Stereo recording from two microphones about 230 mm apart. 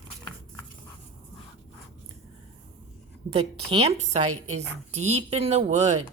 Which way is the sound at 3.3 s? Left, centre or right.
Right.